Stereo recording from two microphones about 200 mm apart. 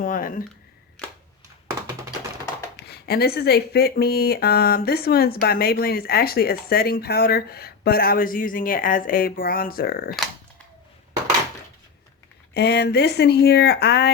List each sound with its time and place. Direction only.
0.0 s a sound: 45° left (ahead or behind)
2.7 s speech: 50° left (ahead or behind)
12.5 s speech: 55° left (ahead or behind)